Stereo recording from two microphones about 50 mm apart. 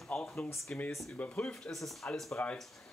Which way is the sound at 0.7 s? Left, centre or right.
Left.